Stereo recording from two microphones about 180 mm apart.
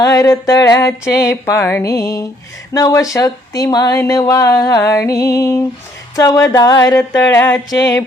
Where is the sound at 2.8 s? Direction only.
20° left (ahead or behind).